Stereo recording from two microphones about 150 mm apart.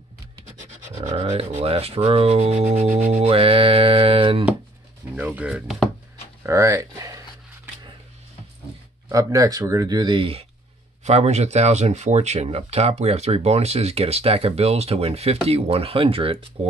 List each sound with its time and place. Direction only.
1.0 s speech: 45° right (ahead or behind)
3.1 s music: 40° right (ahead or behind)
5.1 s speech: 10° right (ahead or behind)
6.4 s a sound: 20° right (ahead or behind)
9.1 s speech: 25° right (ahead or behind)
11.1 s speech: 50° right (ahead or behind)